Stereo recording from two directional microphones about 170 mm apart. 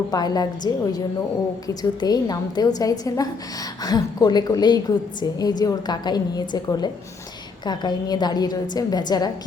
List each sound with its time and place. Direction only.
0.1 s a woman's voice: 25° left (ahead or behind)